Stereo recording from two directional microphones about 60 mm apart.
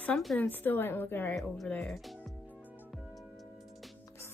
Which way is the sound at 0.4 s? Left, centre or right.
Left.